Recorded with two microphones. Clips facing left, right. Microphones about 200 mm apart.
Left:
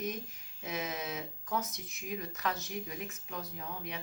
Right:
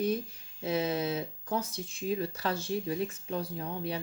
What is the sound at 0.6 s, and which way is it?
Speech, 30° right (ahead or behind).